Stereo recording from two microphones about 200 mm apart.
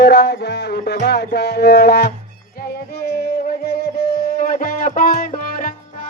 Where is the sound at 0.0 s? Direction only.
60° left (ahead or behind).